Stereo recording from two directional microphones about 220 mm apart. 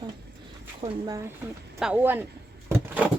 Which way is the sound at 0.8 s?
15° right (ahead or behind).